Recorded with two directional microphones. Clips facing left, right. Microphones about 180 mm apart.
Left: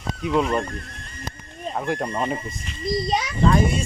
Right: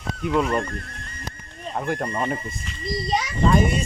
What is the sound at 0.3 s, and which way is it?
Speech, 10° left (ahead or behind).